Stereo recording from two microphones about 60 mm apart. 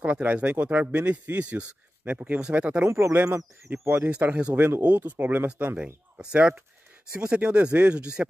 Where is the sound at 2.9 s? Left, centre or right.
Right.